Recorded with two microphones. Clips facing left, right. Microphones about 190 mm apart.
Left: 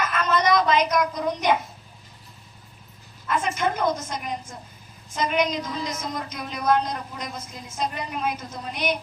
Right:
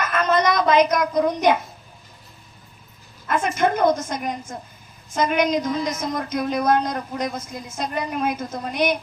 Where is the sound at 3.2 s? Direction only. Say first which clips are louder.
Right 4 dB; 50° right (ahead or behind).